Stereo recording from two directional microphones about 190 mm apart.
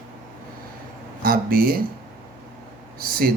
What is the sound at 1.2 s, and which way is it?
Speech, 50° right (ahead or behind).